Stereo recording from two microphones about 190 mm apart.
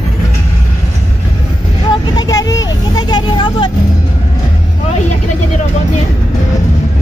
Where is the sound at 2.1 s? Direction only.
20° left (ahead or behind).